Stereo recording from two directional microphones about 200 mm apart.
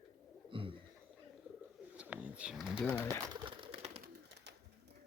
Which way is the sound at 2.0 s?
5° right (ahead or behind).